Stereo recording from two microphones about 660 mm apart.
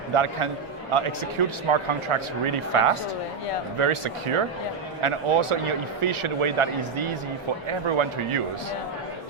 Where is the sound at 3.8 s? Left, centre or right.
Right.